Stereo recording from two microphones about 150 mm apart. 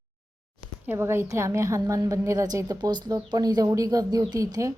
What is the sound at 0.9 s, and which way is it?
A woman's voice, 15° right (ahead or behind).